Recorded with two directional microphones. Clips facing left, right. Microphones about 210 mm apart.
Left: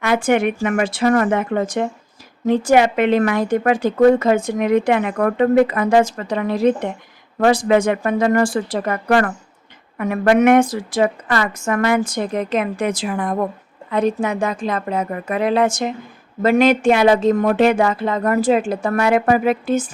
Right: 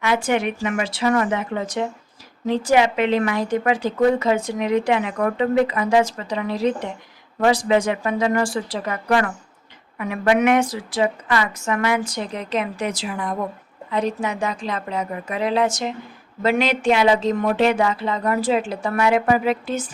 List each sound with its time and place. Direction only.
0.0 s speech: 50° left (ahead or behind)